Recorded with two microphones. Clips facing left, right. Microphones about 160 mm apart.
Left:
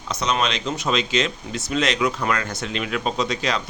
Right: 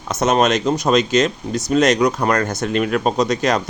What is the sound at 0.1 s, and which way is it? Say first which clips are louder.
A man's voice: right 8 dB; 45° right (ahead or behind).